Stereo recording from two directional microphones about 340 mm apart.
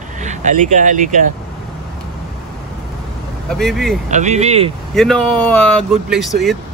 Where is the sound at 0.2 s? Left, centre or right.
Right.